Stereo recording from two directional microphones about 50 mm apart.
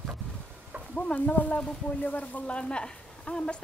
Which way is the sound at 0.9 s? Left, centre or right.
Left.